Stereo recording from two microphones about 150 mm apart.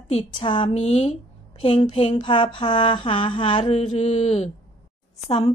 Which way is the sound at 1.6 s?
35° left (ahead or behind).